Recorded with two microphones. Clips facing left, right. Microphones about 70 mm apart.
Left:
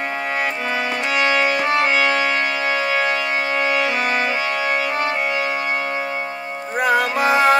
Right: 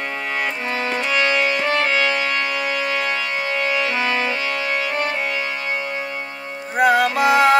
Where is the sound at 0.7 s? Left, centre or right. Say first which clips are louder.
Right 2 dB; centre.